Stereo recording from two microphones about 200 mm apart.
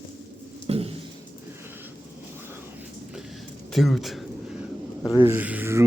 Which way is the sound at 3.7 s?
Centre (ahead or behind).